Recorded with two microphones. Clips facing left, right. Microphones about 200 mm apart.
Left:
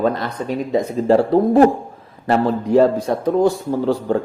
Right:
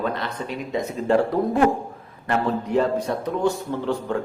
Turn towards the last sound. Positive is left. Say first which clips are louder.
# left 6 dB
turn(degrees=35)  # may be behind; listen again after turning